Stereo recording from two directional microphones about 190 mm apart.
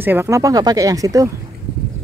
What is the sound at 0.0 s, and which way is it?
Speech, 10° right (ahead or behind).